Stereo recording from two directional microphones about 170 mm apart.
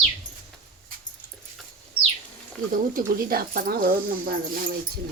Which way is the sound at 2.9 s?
55° right (ahead or behind).